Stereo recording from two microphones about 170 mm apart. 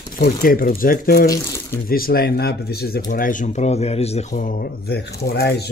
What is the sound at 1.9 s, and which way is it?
Speech, 60° left (ahead or behind).